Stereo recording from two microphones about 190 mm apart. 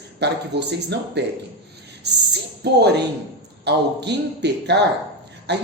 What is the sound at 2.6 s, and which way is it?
A man's voice, 60° right (ahead or behind).